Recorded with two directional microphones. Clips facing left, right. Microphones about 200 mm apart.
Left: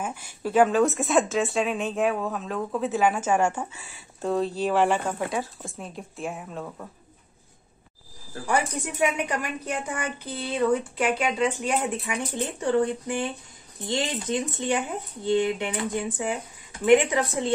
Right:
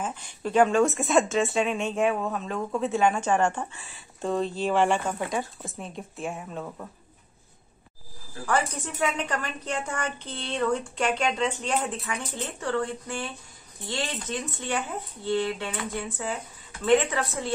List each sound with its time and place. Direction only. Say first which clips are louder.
0.0 s a woman's voice: left 1 dB; 10° left (ahead or behind)
8.5 s a woman's voice: left 1 dB; 15° left (ahead or behind)